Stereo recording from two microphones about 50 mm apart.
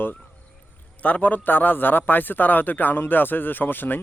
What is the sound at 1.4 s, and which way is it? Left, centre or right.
Speech, left.